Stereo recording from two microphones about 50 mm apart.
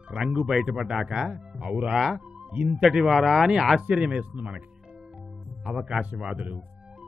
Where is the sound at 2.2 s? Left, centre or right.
Right.